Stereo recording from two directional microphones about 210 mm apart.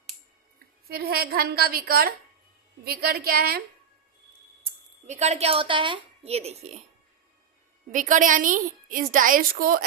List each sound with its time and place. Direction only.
0.9 s a woman's voice: 50° right (ahead or behind)
4.6 s a woman's voice: 35° right (ahead or behind)
7.9 s a woman's voice: 40° right (ahead or behind)